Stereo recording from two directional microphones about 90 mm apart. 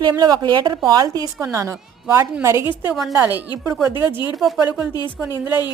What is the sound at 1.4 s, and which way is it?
Speech, 35° right (ahead or behind).